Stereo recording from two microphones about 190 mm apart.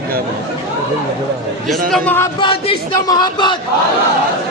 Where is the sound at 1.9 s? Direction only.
10° left (ahead or behind).